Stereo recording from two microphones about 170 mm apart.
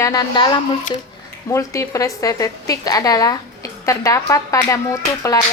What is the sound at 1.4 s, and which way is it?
A woman's voice, 15° left (ahead or behind).